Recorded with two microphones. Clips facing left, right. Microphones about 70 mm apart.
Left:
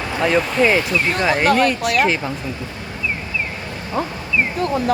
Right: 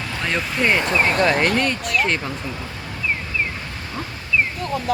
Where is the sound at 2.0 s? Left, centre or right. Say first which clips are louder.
Left 3 dB; centre.